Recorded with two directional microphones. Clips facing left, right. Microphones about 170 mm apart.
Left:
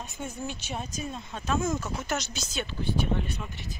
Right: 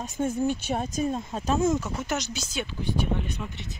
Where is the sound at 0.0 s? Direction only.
45° right (ahead or behind).